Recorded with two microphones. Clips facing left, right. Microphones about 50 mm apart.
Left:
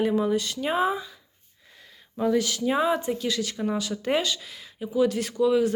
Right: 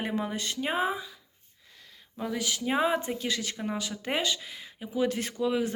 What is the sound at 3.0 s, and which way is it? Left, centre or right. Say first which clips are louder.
Speech: left 4 dB; right.